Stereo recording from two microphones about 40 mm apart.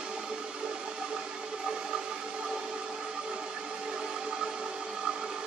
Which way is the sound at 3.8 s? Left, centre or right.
Centre.